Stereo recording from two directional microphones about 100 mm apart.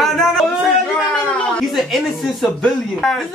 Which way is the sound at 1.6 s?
Centre (ahead or behind).